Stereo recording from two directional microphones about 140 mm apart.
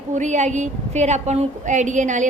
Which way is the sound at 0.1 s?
60° right (ahead or behind).